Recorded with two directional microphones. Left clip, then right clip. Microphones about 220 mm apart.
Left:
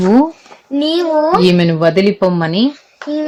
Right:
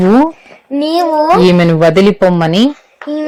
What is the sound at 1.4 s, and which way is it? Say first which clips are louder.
Speech: right 4 dB; 15° right (ahead or behind).